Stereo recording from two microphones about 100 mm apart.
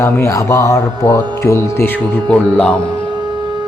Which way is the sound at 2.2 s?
10° left (ahead or behind).